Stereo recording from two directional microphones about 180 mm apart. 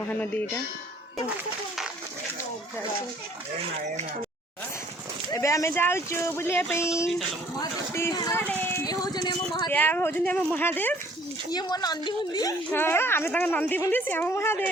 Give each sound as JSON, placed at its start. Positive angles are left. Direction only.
{"t": 0.1, "sound": "a woman's voice", "side_deg": 10}
{"t": 5.3, "sound": "a woman's voice", "side_deg": 15}
{"t": 9.6, "sound": "a woman's voice", "side_deg": 10}
{"t": 11.5, "sound": "a woman's voice", "side_deg": 20}